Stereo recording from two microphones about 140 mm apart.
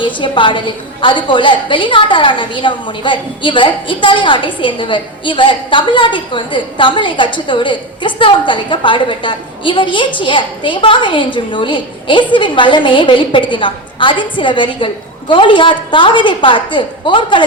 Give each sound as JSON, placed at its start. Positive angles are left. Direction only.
{"t": 0.0, "sound": "a woman's voice", "side_deg": 35}